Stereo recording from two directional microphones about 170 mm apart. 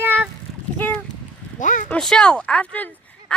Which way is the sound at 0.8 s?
10° left (ahead or behind).